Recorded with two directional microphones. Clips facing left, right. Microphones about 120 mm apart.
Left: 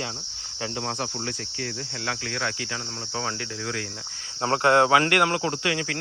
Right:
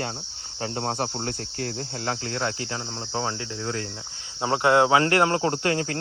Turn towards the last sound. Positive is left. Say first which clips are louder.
# right 3 dB
turn(degrees=-35)  # may be behind; listen again after turning